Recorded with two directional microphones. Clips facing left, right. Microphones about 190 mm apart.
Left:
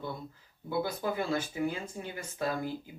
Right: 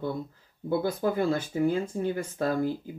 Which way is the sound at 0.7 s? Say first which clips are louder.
Right 5 dB; 50° right (ahead or behind).